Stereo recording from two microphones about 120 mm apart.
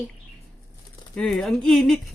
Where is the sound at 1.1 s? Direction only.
5° left (ahead or behind).